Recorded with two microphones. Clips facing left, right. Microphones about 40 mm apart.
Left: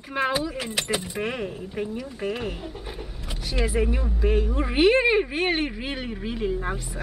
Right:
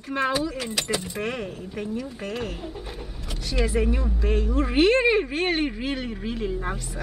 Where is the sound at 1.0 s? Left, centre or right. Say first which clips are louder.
Left 1 dB; centre.